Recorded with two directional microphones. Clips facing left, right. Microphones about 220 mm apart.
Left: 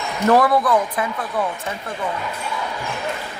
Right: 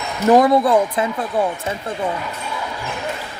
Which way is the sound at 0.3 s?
20° right (ahead or behind).